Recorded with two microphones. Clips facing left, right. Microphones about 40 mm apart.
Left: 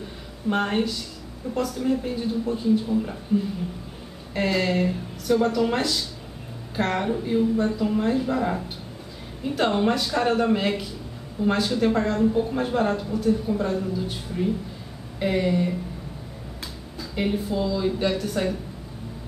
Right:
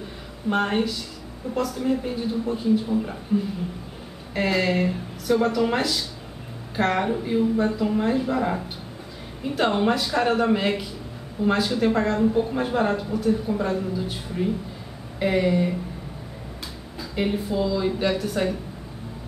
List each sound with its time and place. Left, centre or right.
0.5 s speech: centre
4.3 s a woman's voice: centre
17.1 s speech: centre